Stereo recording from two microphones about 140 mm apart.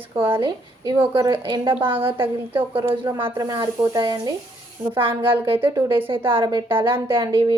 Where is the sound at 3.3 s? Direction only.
30° right (ahead or behind).